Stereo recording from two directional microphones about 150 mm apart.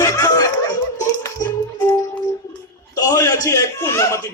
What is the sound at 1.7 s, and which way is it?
Music, 25° left (ahead or behind).